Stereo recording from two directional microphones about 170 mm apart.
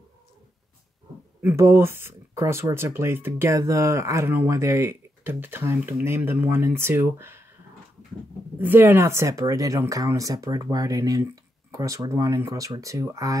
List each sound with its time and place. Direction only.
1.4 s speech: 15° right (ahead or behind)
8.5 s speech: 10° right (ahead or behind)